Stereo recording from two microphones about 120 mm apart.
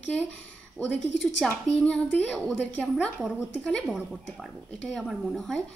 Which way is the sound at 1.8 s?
10° left (ahead or behind).